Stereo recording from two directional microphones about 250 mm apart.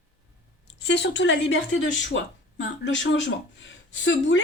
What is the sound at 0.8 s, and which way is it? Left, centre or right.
Speech, left.